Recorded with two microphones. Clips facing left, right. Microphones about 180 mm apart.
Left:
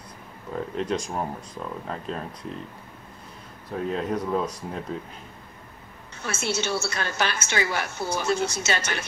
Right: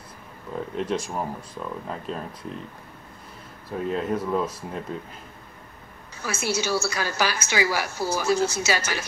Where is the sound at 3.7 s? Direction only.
Centre (ahead or behind).